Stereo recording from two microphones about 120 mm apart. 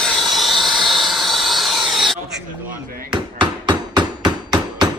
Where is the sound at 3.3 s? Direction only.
40° right (ahead or behind).